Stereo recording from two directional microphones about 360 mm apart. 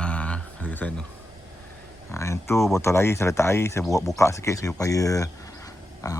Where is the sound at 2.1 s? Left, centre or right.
Centre.